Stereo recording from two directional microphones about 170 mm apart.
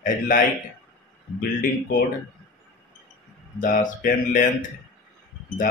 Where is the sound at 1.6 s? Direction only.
55° left (ahead or behind).